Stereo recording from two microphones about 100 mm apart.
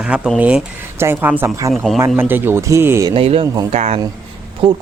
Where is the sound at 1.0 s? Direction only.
20° right (ahead or behind).